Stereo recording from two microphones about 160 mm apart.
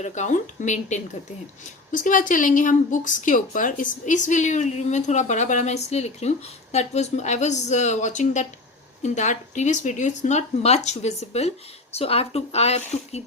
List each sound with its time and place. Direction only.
0.0 s a woman's voice: 50° left (ahead or behind)